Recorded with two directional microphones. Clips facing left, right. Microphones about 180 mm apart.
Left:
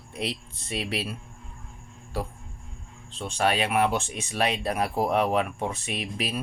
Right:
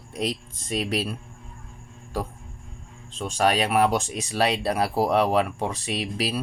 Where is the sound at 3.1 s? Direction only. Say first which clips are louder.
Right 3 dB; 40° right (ahead or behind).